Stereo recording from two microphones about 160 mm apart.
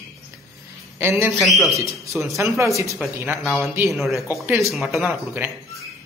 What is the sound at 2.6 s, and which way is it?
Speech, 20° right (ahead or behind).